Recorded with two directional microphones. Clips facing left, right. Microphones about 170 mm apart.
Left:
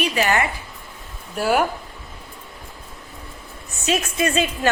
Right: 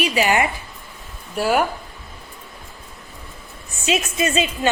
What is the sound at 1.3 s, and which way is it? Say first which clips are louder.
Speech: right 1 dB; centre (ahead or behind).